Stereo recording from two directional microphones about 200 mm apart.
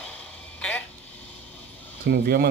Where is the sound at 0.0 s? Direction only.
5° left (ahead or behind).